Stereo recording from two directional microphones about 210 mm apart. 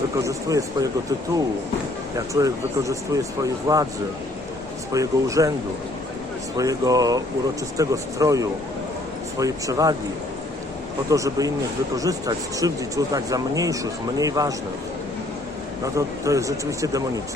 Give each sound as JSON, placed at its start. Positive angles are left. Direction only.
{"t": 0.2, "sound": "speech", "side_deg": -15}
{"t": 2.1, "sound": "speech", "side_deg": -15}
{"t": 4.9, "sound": "speech", "side_deg": -15}
{"t": 6.6, "sound": "speech", "side_deg": -15}
{"t": 11.1, "sound": "speech", "side_deg": -15}
{"t": 15.8, "sound": "speech", "side_deg": -15}